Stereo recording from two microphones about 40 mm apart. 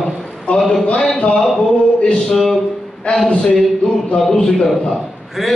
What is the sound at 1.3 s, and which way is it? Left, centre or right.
Speech, centre.